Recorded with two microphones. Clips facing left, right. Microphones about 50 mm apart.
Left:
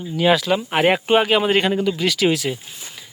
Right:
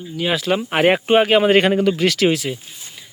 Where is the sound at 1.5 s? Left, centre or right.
Right.